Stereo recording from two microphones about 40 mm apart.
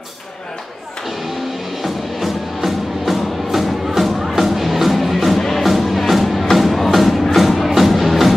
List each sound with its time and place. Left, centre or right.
1.8 s music: centre